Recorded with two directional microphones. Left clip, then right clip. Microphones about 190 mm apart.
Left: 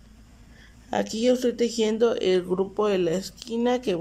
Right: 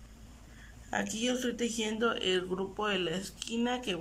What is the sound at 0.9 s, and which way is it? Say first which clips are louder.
Speech: left 10 dB; 25° left (ahead or behind).